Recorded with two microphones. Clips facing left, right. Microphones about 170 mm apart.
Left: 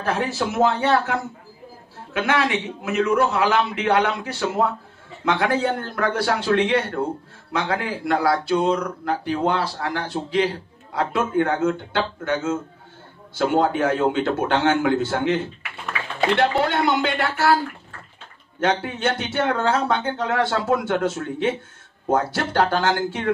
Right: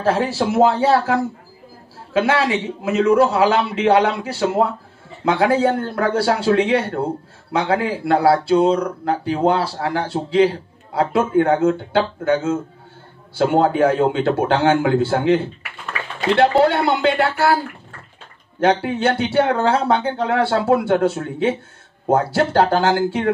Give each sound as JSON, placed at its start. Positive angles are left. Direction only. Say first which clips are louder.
{"t": 0.0, "sound": "a man's voice", "louder": "right 5 dB", "side_deg": -30}
{"t": 18.6, "sound": "speech", "louder": "right 5 dB", "side_deg": -30}